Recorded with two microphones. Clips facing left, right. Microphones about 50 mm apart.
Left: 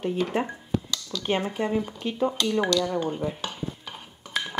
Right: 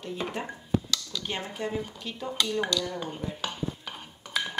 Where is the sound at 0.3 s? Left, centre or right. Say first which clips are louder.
Left 8 dB; left.